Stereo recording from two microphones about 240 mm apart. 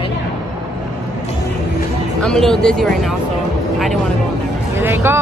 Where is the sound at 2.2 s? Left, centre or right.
Centre.